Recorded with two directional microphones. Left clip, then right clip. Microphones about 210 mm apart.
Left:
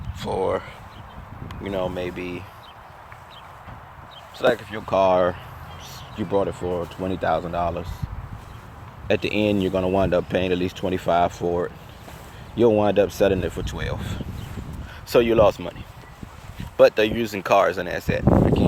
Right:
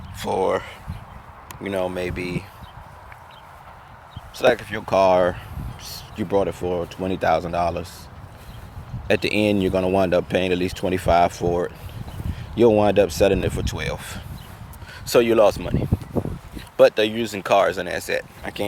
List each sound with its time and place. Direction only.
0.2 s speech: 20° right (ahead or behind)
4.4 s speech: 20° right (ahead or behind)
9.0 s speech: 20° right (ahead or behind)